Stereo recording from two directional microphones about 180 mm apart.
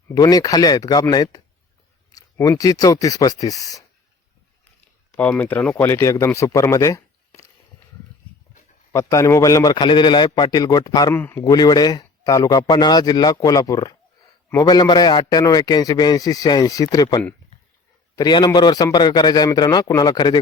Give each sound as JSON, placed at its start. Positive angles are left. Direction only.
{"t": 0.1, "sound": "a man's voice", "side_deg": 20}
{"t": 5.1, "sound": "speech", "side_deg": 10}
{"t": 8.9, "sound": "a man's voice", "side_deg": 15}
{"t": 11.5, "sound": "a man's voice", "side_deg": 25}